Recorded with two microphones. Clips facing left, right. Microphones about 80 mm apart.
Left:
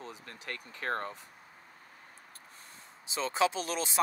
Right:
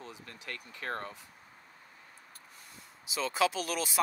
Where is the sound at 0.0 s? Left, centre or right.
Left.